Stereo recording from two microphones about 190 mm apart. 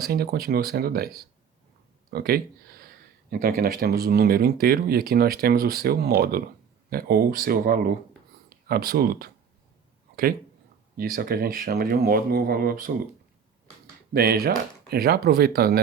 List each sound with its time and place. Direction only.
0.0 s speech: 55° right (ahead or behind)
10.9 s speech: 50° right (ahead or behind)
14.1 s speech: 55° right (ahead or behind)